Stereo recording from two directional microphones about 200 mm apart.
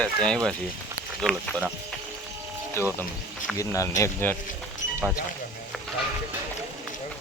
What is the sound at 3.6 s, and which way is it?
Speech, 15° left (ahead or behind).